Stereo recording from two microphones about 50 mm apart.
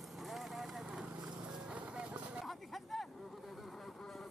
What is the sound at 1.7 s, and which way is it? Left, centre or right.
Clip-clop, centre.